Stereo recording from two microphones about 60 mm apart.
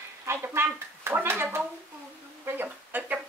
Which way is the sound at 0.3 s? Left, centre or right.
Right.